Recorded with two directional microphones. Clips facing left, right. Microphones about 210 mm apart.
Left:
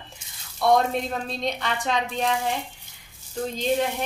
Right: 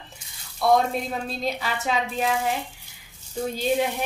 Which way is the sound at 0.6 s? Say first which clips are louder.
Even; centre (ahead or behind).